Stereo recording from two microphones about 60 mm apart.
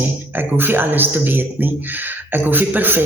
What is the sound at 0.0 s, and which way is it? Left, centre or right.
A man's voice, right.